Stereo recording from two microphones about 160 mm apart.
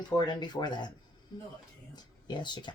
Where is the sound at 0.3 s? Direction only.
25° left (ahead or behind).